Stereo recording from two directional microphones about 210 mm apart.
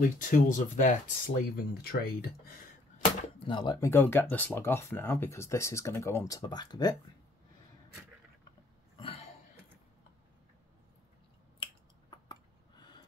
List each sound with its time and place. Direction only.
0.2 s speech: 40° left (ahead or behind)
3.3 s speech: 20° left (ahead or behind)
8.9 s a sound: 25° left (ahead or behind)
11.6 s finger snapping: 20° left (ahead or behind)